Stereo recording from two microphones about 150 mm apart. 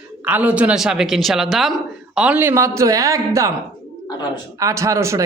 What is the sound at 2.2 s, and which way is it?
A man's voice, 10° right (ahead or behind).